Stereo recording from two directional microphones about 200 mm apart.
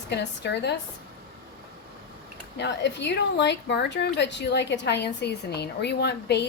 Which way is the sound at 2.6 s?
60° left (ahead or behind).